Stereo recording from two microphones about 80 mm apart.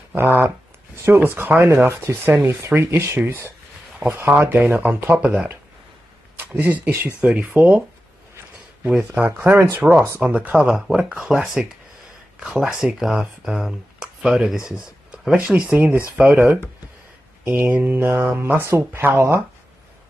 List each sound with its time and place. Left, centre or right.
0.1 s speech: right
6.3 s speech: right
8.8 s speech: centre
9.2 s speech: right; by 11.6 s centre
12.7 s speech: centre; by 19.4 s right